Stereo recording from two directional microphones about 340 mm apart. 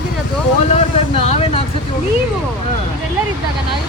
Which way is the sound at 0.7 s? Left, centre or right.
Centre.